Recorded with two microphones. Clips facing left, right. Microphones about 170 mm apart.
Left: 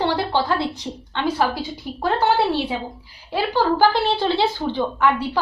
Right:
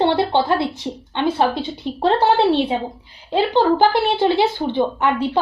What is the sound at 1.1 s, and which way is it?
A woman's voice, 20° right (ahead or behind).